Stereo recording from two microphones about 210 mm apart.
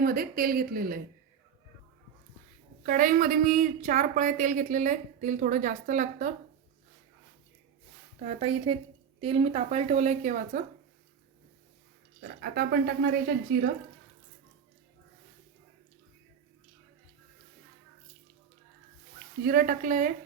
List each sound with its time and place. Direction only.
0.0 s a woman's voice: 45° right (ahead or behind)
2.8 s speech: 40° right (ahead or behind)
8.2 s speech: 30° right (ahead or behind)
12.4 s a woman's voice: 45° right (ahead or behind)
19.4 s speech: 45° right (ahead or behind)